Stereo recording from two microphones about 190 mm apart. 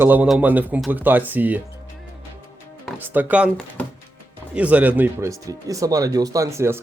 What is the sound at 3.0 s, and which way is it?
Speech, 10° right (ahead or behind).